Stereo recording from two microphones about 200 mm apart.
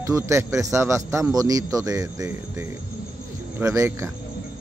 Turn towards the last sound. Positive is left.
turn(degrees=-15)  # may be behind; listen again after turning